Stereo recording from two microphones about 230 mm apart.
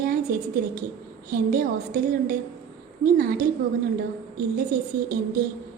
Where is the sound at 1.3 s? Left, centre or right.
Right.